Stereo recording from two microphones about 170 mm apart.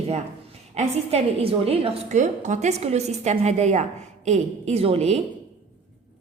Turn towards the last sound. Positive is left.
turn(degrees=-40)  # may be behind; listen again after turning